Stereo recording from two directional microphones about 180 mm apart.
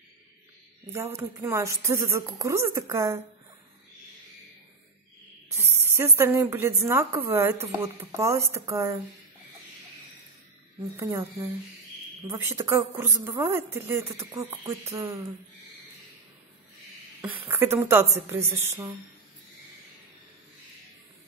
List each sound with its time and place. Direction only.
0.9 s a woman's voice: 15° right (ahead or behind)
5.5 s a woman's voice: 15° right (ahead or behind)
11.0 s a woman's voice: 20° right (ahead or behind)
17.2 s a woman's voice: 15° right (ahead or behind)